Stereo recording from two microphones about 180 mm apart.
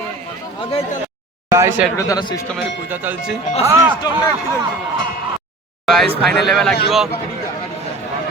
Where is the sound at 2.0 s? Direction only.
20° left (ahead or behind).